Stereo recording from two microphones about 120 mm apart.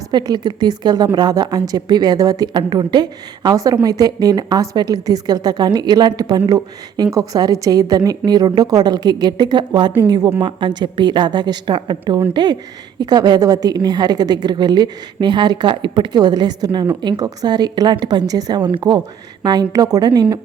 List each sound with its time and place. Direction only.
0.1 s a woman's voice: 35° right (ahead or behind)